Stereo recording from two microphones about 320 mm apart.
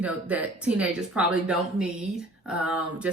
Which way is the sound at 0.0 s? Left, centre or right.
Centre.